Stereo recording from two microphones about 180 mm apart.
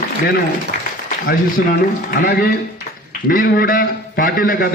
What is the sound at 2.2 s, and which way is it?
A man's voice, 55° left (ahead or behind).